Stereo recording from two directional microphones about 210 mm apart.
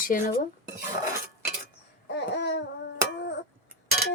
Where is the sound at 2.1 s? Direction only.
55° left (ahead or behind).